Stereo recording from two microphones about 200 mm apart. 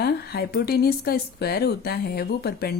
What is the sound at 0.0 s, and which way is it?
A woman's voice, 50° left (ahead or behind).